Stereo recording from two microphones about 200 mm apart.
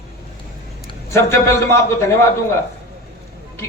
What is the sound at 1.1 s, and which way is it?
Speech, 15° left (ahead or behind).